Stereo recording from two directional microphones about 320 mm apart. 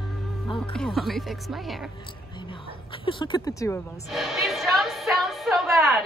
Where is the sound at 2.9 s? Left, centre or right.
Centre.